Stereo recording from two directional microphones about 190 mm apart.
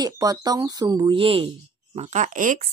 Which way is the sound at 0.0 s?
20° right (ahead or behind).